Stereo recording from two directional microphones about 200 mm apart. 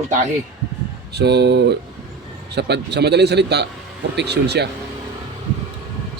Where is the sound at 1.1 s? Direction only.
55° right (ahead or behind).